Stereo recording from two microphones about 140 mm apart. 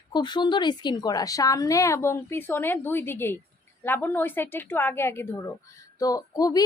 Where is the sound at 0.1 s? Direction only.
30° left (ahead or behind).